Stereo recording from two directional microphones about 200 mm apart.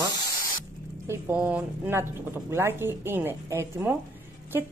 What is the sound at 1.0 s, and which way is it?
A woman's voice, 10° right (ahead or behind).